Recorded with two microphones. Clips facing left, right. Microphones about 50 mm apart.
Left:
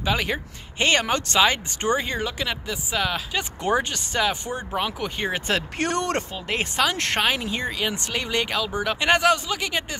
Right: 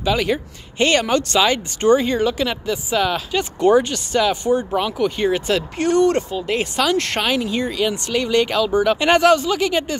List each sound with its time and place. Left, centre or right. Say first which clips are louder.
0.0 s speech: right 5 dB; left; by 3.4 s centre
3.6 s speech: right 9 dB; left
5.8 s speech: right 12 dB; left
6.3 s speech: right 5 dB; left; by 9.9 s centre